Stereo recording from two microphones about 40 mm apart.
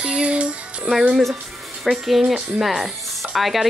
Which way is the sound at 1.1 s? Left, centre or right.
Centre.